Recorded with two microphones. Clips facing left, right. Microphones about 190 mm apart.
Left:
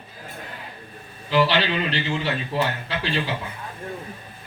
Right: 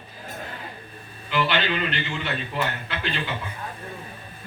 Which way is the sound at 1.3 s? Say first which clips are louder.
Left 4 dB; 35° left (ahead or behind).